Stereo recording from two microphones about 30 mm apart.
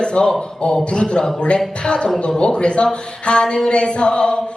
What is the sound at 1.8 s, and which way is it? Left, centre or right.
Music, left.